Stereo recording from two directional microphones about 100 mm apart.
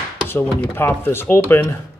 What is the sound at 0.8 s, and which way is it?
Speech, 25° left (ahead or behind).